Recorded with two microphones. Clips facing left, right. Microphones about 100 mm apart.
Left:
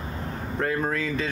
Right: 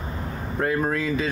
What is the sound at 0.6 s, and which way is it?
Speech, 10° right (ahead or behind).